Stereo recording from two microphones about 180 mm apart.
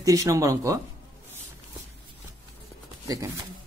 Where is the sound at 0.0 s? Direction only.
20° right (ahead or behind).